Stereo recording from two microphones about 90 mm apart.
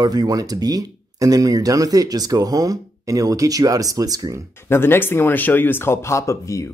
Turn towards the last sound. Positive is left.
turn(degrees=35)  # may be behind; listen again after turning